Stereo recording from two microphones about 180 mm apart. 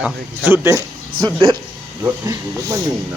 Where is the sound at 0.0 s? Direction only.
15° right (ahead or behind).